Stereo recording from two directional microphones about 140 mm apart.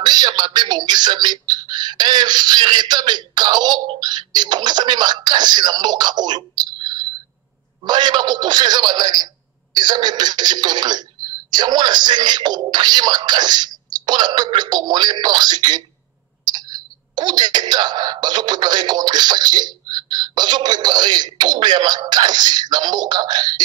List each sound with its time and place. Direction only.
0.0 s speech: 30° right (ahead or behind)